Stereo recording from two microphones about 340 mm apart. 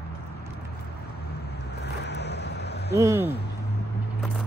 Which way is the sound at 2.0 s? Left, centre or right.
Left.